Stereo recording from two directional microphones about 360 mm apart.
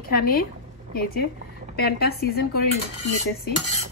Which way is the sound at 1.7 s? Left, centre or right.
Left.